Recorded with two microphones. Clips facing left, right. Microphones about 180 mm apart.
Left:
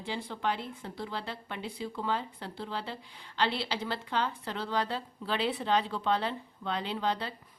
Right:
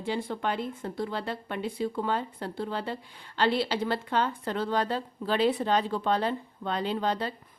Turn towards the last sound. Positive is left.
turn(degrees=-45)  # may be behind; listen again after turning